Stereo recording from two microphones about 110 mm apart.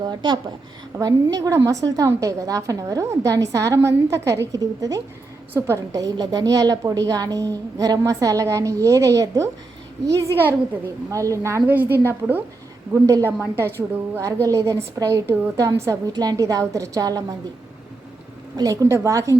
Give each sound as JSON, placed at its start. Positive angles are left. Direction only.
{"t": 0.0, "sound": "a woman's voice", "side_deg": -45}
{"t": 0.9, "sound": "a woman's voice", "side_deg": -30}
{"t": 11.6, "sound": "a woman's voice", "side_deg": -15}
{"t": 18.5, "sound": "a woman's voice", "side_deg": -30}